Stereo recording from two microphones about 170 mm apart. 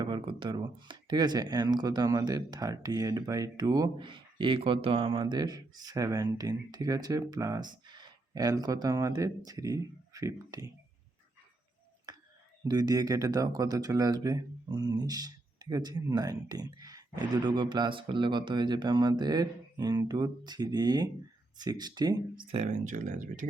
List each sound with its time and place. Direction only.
0.0 s speech: 25° right (ahead or behind)
12.1 s whispering: 25° right (ahead or behind)
12.6 s speech: 25° right (ahead or behind)
22.5 s speech: 45° right (ahead or behind)